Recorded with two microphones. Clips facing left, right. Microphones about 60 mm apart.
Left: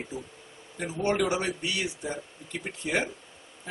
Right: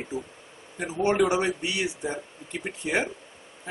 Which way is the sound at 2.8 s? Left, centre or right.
Centre.